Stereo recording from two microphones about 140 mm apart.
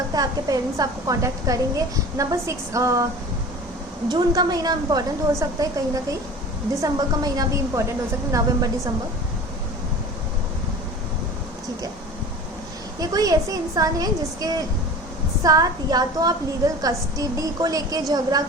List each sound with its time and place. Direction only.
0.1 s a woman's voice: 25° right (ahead or behind)
4.1 s a woman's voice: 30° right (ahead or behind)
13.0 s a woman's voice: 25° right (ahead or behind)